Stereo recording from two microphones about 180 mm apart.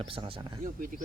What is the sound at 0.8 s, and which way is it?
Speech, 50° right (ahead or behind).